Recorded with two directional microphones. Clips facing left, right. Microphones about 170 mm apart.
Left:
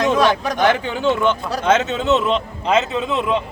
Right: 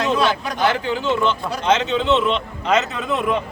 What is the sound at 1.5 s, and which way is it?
A man's voice, 40° left (ahead or behind).